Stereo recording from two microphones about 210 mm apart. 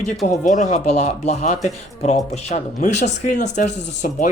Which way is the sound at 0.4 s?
35° left (ahead or behind).